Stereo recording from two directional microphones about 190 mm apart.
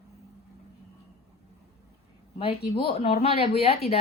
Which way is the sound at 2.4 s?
30° left (ahead or behind).